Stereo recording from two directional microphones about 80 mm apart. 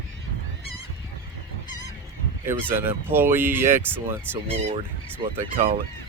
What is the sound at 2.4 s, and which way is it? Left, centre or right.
Speech, right.